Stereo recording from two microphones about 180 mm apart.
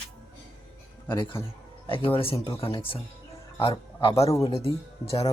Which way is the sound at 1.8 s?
30° left (ahead or behind).